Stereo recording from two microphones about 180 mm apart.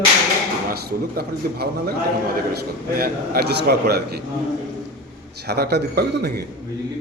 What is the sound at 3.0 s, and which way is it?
A man's voice, 55° right (ahead or behind).